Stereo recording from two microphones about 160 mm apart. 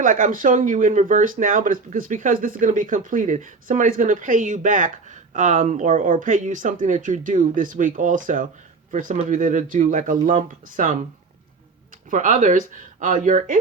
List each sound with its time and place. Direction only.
0.0 s speech: 55° right (ahead or behind)
12.1 s speech: 50° right (ahead or behind)